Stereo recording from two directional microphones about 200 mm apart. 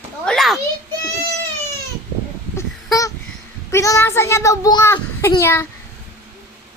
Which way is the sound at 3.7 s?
15° left (ahead or behind).